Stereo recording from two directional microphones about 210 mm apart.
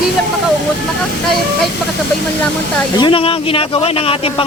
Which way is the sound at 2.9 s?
25° left (ahead or behind).